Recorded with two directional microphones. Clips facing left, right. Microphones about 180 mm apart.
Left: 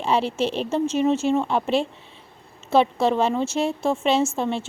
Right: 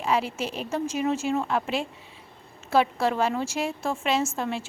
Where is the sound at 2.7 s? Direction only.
25° left (ahead or behind).